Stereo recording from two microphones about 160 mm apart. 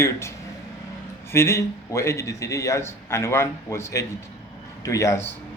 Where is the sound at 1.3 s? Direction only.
15° left (ahead or behind).